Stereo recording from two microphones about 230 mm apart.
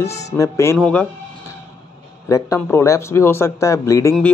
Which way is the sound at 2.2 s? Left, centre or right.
Centre.